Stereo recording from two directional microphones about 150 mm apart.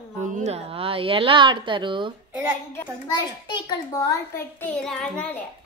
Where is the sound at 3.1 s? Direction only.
25° left (ahead or behind).